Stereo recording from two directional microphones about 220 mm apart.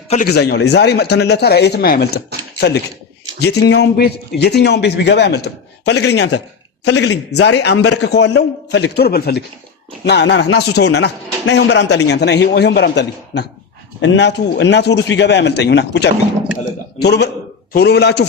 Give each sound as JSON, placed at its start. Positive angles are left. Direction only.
{"t": 0.3, "sound": "a man's voice", "side_deg": 50}